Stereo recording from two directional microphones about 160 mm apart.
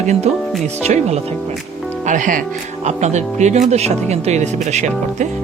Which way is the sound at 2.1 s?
55° right (ahead or behind).